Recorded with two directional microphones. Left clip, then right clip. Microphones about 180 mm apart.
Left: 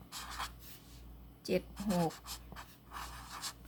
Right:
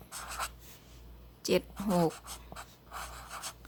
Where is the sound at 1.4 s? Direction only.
25° right (ahead or behind).